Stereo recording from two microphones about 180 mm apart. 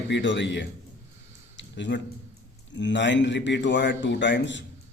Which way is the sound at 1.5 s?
85° left.